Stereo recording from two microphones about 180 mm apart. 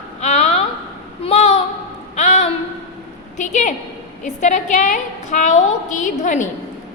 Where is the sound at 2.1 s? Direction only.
40° left (ahead or behind).